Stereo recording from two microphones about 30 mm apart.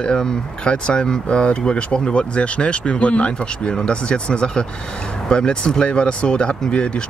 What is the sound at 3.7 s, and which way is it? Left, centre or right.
Speech, left.